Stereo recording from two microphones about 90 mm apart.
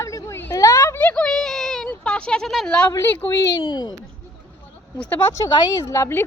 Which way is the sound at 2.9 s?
30° left (ahead or behind).